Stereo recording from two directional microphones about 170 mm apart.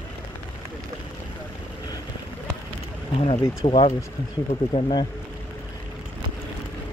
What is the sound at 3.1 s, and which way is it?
Speech, 35° left (ahead or behind).